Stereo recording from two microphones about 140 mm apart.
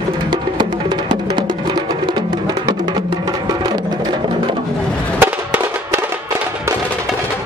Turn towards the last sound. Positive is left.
turn(degrees=-15)  # may be behind; listen again after turning